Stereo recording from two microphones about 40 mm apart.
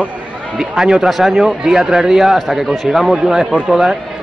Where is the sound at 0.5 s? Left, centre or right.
Centre.